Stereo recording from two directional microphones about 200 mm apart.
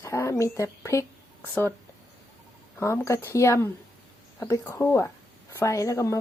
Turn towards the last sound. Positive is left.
turn(degrees=15)  # may be behind; listen again after turning